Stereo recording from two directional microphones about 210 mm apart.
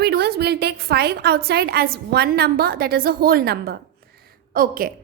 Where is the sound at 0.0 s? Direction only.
50° right (ahead or behind).